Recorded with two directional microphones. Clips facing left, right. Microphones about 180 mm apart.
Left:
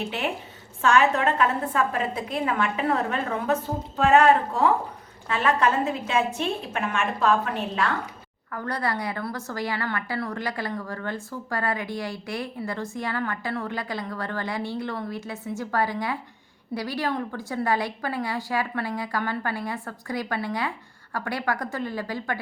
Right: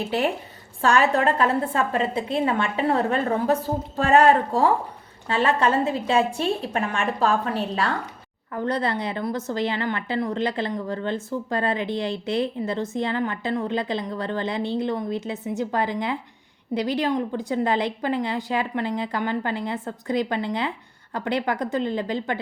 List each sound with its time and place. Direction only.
0.8 s a woman's voice: 35° right (ahead or behind)
8.5 s a woman's voice: 20° right (ahead or behind)